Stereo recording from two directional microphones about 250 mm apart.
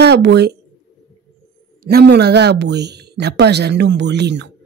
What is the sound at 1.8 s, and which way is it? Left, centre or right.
Speech, right.